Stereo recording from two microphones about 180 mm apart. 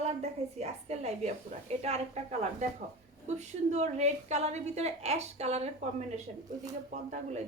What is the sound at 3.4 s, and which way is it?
A woman's voice, 40° right (ahead or behind).